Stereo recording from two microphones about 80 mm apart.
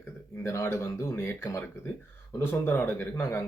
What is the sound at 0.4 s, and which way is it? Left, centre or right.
Speech, left.